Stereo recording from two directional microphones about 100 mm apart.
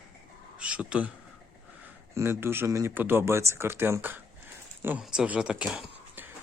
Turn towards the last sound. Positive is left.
turn(degrees=-10)  # may be behind; listen again after turning